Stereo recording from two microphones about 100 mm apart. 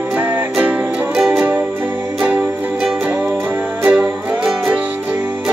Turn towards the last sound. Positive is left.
turn(degrees=-5)  # may be behind; listen again after turning